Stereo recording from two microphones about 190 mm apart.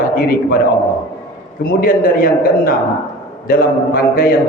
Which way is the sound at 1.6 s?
50° left (ahead or behind).